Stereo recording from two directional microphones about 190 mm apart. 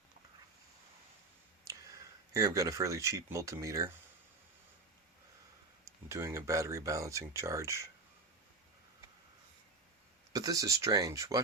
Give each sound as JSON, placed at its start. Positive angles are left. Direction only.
{"t": 1.6, "sound": "speech", "side_deg": -20}
{"t": 5.8, "sound": "speech", "side_deg": -15}
{"t": 10.3, "sound": "speech", "side_deg": -20}